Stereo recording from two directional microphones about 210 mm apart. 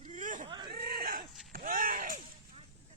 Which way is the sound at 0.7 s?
45° right (ahead or behind).